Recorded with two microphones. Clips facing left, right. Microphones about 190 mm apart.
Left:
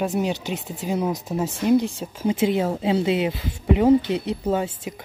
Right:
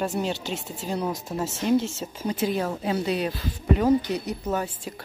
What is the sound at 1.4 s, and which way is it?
Speech, 15° left (ahead or behind).